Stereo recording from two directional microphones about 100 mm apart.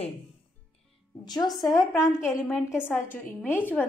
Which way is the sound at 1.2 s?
45° left (ahead or behind).